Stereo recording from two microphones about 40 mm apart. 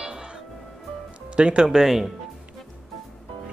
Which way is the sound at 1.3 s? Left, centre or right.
Right.